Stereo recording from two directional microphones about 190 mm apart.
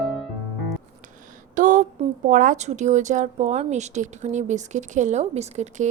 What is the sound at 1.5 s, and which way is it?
A woman's voice, 40° right (ahead or behind).